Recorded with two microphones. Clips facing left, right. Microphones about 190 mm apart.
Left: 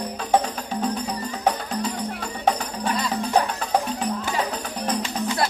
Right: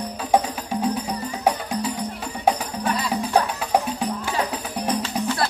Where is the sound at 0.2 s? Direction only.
10° right (ahead or behind).